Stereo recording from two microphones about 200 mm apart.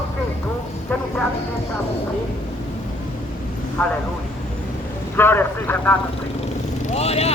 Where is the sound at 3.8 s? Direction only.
10° left (ahead or behind).